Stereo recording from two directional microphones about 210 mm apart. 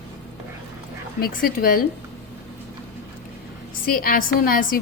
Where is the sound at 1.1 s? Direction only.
45° left (ahead or behind).